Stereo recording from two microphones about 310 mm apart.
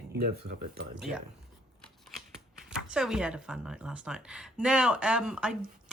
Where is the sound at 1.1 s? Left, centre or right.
Right.